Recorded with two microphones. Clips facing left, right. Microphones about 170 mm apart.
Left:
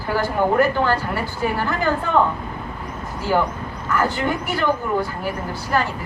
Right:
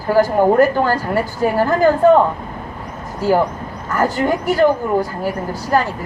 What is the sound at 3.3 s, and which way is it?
A woman's voice, 40° right (ahead or behind).